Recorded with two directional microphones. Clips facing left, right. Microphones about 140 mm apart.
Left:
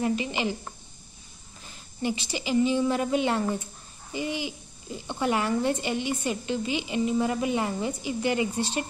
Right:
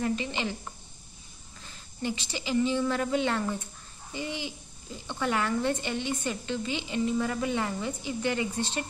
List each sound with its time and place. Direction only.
0.0 s a woman's voice: 15° left (ahead or behind)
2.0 s a woman's voice: 15° left (ahead or behind)